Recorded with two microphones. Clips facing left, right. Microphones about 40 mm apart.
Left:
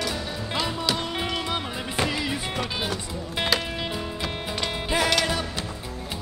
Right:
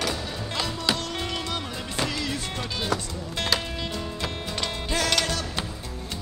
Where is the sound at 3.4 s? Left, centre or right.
Centre.